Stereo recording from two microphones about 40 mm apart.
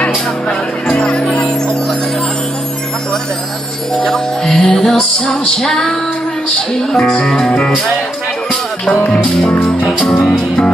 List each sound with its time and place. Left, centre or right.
0.8 s music: left
4.1 s music: centre
7.2 s speech: centre
9.2 s music: left